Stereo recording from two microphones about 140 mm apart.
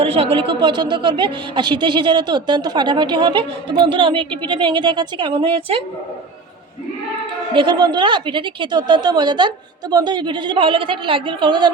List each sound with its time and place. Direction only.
0.0 s a woman's voice: 45° right (ahead or behind)
7.5 s a woman's voice: 35° right (ahead or behind)